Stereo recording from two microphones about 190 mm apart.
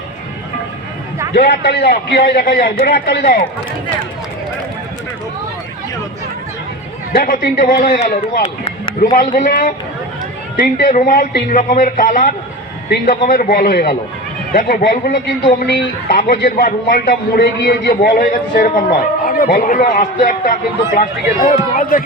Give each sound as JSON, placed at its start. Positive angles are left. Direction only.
{"t": 1.3, "sound": "a man's voice", "side_deg": 60}
{"t": 7.1, "sound": "a man's voice", "side_deg": 50}